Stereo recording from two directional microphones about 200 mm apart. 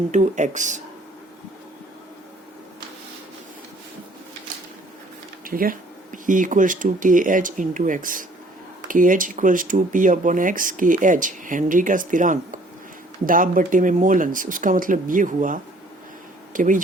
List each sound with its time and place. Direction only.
0.1 s speech: 35° right (ahead or behind)
5.5 s speech: 45° right (ahead or behind)